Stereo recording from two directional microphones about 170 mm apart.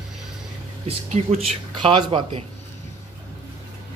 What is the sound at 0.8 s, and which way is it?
Speech, 35° right (ahead or behind).